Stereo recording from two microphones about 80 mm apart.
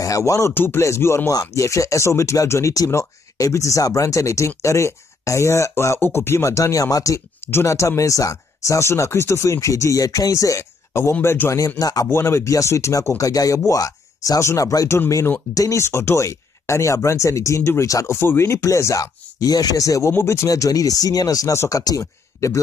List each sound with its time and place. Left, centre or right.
0.0 s speech: left
11.8 s speech: left
12.1 s speech: left
18.1 s speech: left
19.4 s speech: left
20.4 s speech: left